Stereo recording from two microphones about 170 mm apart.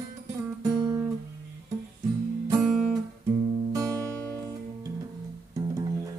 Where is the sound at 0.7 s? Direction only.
20° right (ahead or behind).